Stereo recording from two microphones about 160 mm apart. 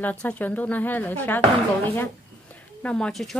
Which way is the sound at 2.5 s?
5° left (ahead or behind).